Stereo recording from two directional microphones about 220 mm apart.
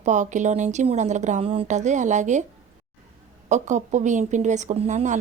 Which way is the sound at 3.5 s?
35° right (ahead or behind).